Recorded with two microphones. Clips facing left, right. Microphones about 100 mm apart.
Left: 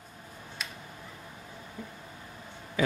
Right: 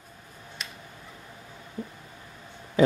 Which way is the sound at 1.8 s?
40° right (ahead or behind).